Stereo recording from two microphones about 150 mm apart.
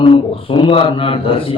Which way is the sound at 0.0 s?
35° left (ahead or behind).